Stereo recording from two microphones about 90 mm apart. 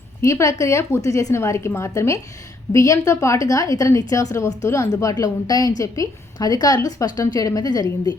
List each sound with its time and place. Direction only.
0.2 s a woman's voice: 35° left (ahead or behind)